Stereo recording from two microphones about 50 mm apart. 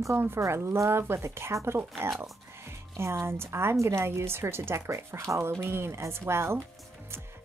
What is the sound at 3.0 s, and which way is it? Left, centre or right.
Speech, right.